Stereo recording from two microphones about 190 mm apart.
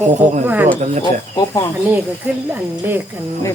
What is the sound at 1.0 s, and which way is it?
Speech, 20° left (ahead or behind).